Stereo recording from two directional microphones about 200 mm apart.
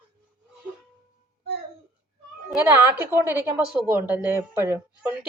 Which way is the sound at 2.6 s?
10° right (ahead or behind).